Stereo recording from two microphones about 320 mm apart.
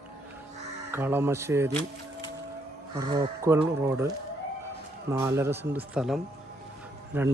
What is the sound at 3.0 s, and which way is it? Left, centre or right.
Speech, centre.